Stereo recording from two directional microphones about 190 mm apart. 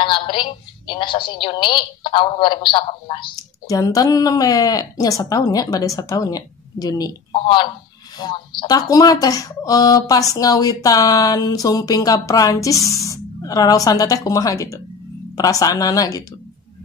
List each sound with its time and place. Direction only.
0.0 s a woman's voice: 25° left (ahead or behind)